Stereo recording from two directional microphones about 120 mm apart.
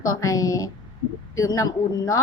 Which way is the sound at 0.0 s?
30° left (ahead or behind).